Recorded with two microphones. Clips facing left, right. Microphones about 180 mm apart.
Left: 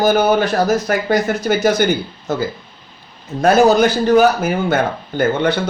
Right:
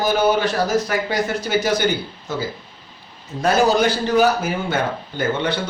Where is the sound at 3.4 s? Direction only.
45° left (ahead or behind).